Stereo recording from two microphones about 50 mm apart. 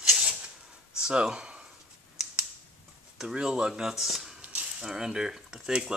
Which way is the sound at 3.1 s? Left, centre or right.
Centre.